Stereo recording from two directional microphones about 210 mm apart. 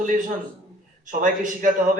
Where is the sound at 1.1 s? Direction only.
40° right (ahead or behind).